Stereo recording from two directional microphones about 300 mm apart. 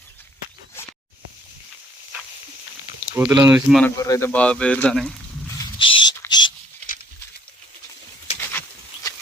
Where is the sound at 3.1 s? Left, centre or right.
Centre.